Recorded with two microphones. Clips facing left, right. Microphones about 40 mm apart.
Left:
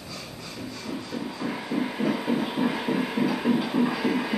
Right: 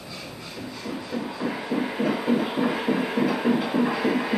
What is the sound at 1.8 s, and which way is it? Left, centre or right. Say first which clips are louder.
Heart murmur: even; centre.